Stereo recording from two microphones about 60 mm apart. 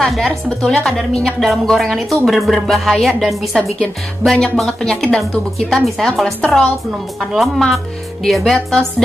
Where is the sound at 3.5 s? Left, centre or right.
Centre.